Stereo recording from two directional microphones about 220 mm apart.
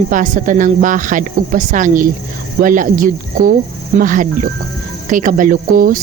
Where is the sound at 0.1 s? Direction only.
35° right (ahead or behind).